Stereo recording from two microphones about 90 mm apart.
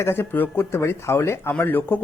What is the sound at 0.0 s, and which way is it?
Speech, 25° left (ahead or behind).